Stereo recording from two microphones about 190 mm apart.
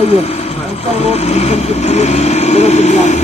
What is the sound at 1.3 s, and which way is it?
Speech, 35° left (ahead or behind).